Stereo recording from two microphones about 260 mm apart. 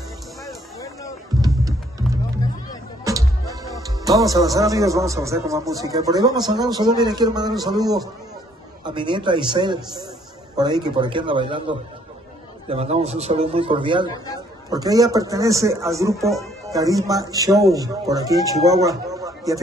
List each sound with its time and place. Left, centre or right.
3.1 s speech: centre
8.8 s a man's voice: centre